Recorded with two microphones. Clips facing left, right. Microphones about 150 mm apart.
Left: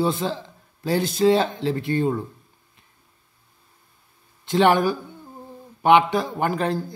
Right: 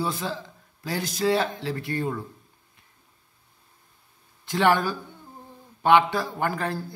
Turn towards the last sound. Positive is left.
turn(degrees=20)  # may be behind; listen again after turning